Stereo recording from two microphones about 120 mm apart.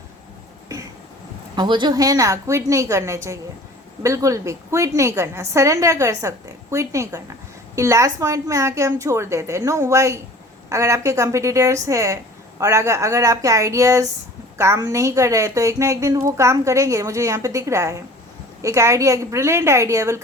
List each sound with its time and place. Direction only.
1.5 s speech: 40° right (ahead or behind); by 20.2 s 25° right (ahead or behind)